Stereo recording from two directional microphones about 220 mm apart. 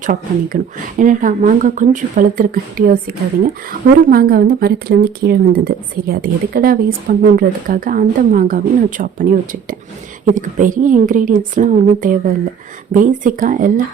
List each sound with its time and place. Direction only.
0.0 s a woman's voice: 35° right (ahead or behind)